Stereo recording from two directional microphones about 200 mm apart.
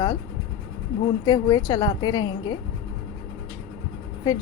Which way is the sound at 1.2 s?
20° left (ahead or behind).